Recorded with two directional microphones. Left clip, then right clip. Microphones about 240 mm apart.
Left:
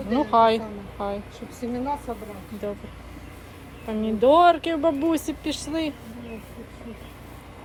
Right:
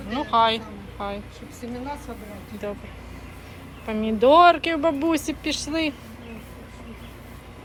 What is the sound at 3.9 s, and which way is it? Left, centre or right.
Speech, centre.